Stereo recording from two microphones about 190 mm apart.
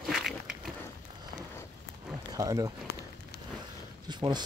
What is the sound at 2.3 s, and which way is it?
Speech, 20° right (ahead or behind).